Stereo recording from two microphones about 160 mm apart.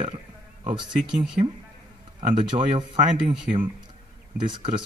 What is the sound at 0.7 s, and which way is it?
Speech, 30° right (ahead or behind).